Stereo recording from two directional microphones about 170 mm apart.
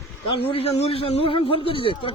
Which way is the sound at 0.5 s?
35° left (ahead or behind).